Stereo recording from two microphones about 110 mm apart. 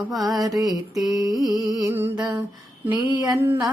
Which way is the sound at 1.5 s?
35° right (ahead or behind).